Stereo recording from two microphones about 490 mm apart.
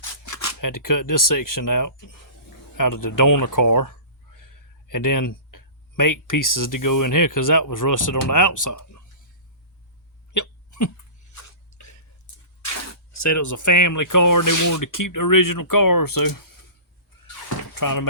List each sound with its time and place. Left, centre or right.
0.0 s speech: left
10.3 s hiccup: left
11.3 s a sound: left
13.1 s speech: left
17.7 s speech: left